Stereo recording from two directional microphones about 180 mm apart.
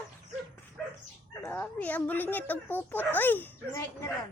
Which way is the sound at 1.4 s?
10° left (ahead or behind).